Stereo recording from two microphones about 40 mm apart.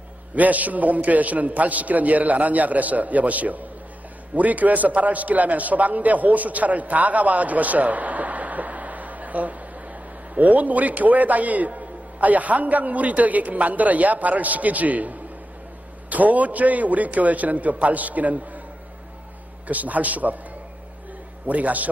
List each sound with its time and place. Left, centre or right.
0.4 s a man's voice: right
19.7 s a man's voice: right
21.5 s a man's voice: right